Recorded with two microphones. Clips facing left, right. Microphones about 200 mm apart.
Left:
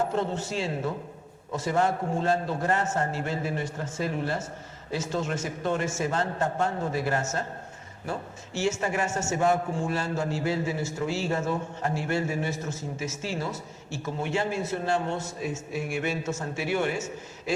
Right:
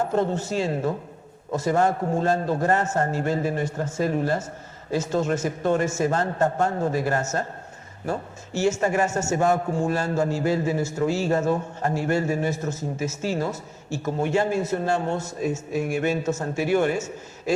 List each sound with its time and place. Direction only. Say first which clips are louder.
0.2 s a man's voice: right 5 dB; 45° right (ahead or behind)
8.5 s a man's voice: right 5 dB; 40° right (ahead or behind)